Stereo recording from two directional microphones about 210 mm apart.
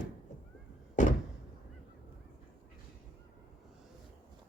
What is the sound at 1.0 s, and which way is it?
Door, 35° left (ahead or behind).